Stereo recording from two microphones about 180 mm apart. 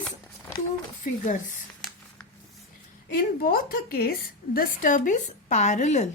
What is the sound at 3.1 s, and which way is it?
A woman's voice, 55° left (ahead or behind).